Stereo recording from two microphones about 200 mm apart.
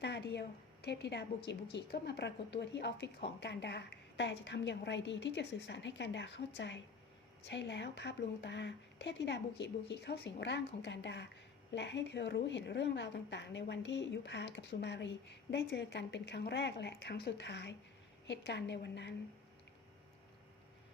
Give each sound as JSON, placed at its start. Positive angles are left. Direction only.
{"t": 0.0, "sound": "a woman's voice", "side_deg": 60}